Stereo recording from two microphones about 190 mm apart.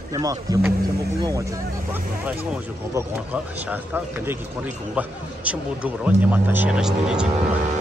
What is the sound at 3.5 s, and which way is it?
A man's voice, 10° right (ahead or behind).